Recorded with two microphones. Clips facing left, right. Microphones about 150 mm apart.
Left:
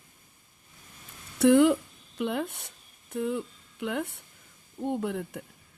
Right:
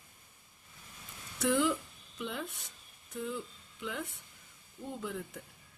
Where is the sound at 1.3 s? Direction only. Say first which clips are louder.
Left 10 dB; 65° left (ahead or behind).